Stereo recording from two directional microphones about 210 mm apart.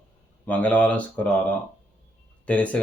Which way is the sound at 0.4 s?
5° left (ahead or behind).